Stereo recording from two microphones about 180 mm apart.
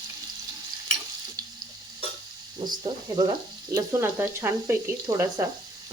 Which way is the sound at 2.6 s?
25° right (ahead or behind).